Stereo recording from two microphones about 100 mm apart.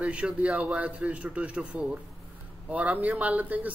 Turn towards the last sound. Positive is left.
turn(degrees=-15)  # may be behind; listen again after turning